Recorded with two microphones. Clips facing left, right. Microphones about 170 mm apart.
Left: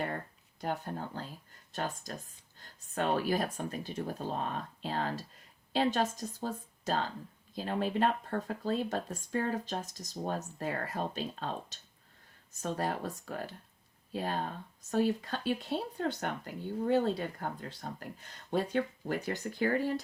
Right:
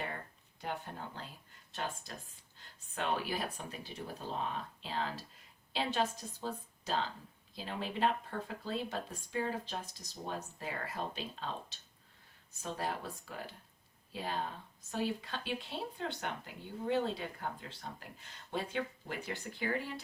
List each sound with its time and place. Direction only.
0.6 s speech: 40° left (ahead or behind)